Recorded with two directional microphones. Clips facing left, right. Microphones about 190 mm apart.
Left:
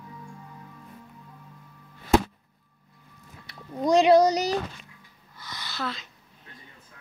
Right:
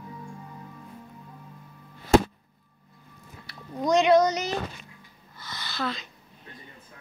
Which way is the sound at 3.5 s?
30° left (ahead or behind).